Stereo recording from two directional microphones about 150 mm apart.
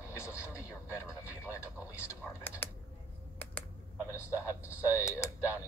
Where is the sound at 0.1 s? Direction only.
20° left (ahead or behind).